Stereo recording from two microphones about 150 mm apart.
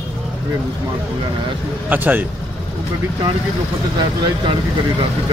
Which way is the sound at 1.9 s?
10° right (ahead or behind).